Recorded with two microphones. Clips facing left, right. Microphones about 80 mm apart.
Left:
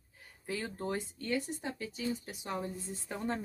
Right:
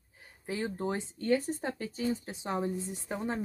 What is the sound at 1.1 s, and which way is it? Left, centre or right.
A woman's voice, right.